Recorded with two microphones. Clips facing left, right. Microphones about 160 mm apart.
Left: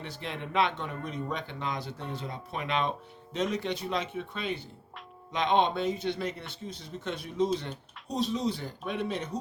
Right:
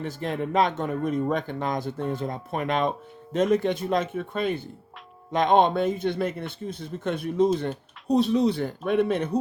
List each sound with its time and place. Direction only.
0.0 s speech: 45° right (ahead or behind)